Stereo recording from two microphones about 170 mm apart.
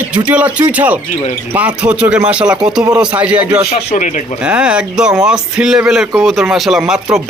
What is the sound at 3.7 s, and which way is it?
Speech, 45° left (ahead or behind).